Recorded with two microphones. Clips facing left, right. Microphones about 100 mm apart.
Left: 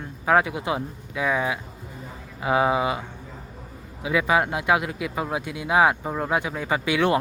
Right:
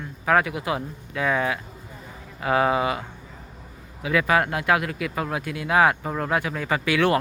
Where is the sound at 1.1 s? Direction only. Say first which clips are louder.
Right 1 dB; 5° left (ahead or behind).